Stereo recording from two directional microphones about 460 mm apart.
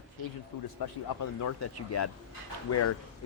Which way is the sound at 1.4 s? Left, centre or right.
Left.